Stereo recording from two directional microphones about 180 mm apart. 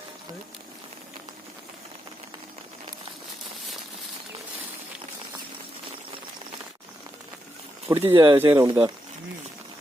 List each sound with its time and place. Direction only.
7.9 s speech: 15° right (ahead or behind)
8.1 s speech: 25° right (ahead or behind)